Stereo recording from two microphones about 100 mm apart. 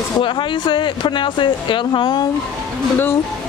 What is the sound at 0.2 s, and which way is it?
Speech, 55° left (ahead or behind).